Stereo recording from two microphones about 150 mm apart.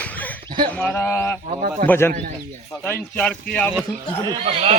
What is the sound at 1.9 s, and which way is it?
Speech, 15° left (ahead or behind).